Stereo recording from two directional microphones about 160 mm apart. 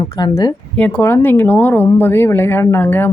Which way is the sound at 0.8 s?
10° left (ahead or behind).